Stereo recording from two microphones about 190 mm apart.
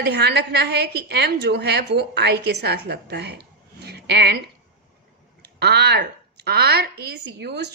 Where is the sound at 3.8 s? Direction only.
60° right (ahead or behind).